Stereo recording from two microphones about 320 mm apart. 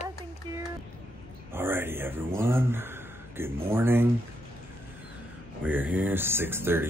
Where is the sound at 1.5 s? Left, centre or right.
Centre.